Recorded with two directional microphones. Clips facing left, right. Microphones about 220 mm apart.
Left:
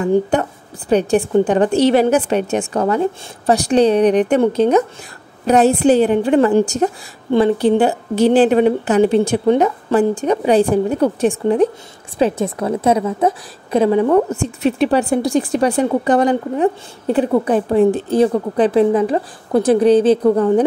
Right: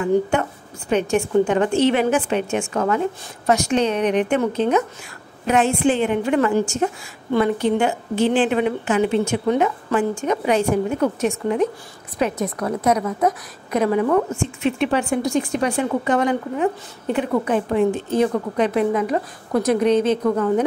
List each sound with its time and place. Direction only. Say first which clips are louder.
0.0 s a woman's voice: left 3 dB; 35° left (ahead or behind)